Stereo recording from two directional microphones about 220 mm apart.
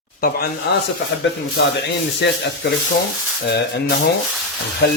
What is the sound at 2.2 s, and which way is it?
A man's voice, 55° left (ahead or behind).